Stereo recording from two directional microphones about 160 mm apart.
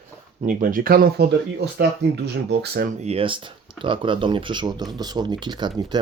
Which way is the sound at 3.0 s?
35° right (ahead or behind).